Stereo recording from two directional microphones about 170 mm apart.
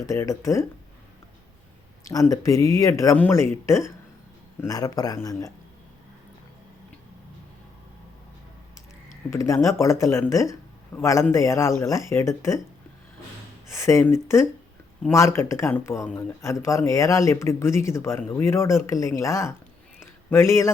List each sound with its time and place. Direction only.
0.0 s speech: 20° left (ahead or behind)
2.0 s speech: 20° left (ahead or behind)
9.3 s speech: 20° left (ahead or behind)
13.7 s speech: 15° left (ahead or behind)